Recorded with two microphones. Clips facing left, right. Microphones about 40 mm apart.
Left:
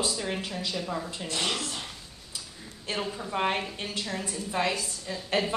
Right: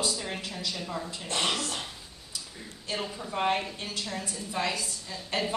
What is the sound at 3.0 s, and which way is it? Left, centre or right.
A woman's voice, centre.